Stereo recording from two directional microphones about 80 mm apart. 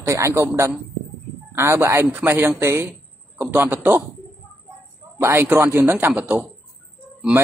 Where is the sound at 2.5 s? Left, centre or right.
Right.